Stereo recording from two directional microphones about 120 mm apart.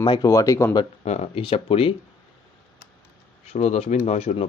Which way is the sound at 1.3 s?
50° left (ahead or behind).